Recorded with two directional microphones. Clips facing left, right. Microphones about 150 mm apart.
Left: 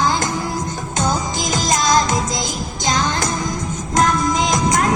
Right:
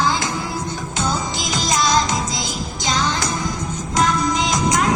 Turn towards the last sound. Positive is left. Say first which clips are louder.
# left 2 dB
turn(degrees=50)  # may be behind; listen again after turning